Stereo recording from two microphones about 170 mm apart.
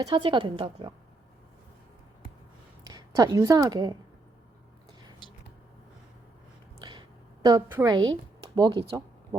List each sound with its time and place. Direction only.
0.0 s a woman's voice: 30° right (ahead or behind)
2.8 s a woman's voice: 25° right (ahead or behind)
6.8 s a sound: 25° right (ahead or behind)
7.7 s a woman's voice: 20° right (ahead or behind)